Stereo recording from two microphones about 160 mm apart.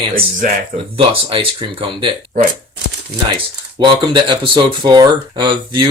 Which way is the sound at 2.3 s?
60° right (ahead or behind).